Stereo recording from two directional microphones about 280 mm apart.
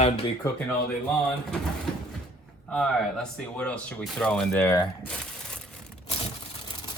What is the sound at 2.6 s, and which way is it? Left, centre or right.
Speech, centre.